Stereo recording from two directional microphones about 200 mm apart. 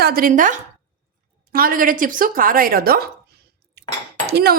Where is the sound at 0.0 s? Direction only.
45° right (ahead or behind).